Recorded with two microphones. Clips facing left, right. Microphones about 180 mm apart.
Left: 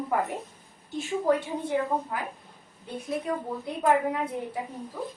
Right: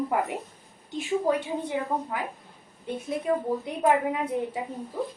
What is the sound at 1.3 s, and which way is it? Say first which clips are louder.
Speech: left 1 dB; 20° right (ahead or behind).